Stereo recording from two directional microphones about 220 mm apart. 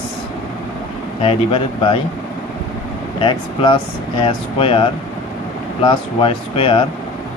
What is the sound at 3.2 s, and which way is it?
Speech, 20° left (ahead or behind).